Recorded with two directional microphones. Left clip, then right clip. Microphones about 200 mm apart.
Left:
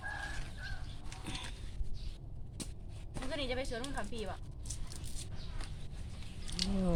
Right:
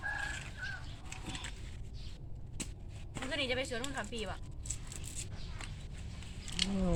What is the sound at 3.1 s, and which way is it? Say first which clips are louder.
Speech: right 3 dB; 5° left (ahead or behind).